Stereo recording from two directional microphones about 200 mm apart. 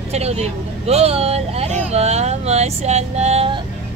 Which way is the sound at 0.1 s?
30° right (ahead or behind).